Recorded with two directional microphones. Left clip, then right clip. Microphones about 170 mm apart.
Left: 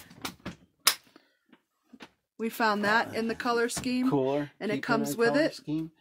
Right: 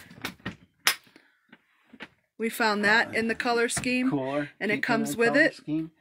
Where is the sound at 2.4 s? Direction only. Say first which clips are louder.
Right 2 dB; 20° left (ahead or behind).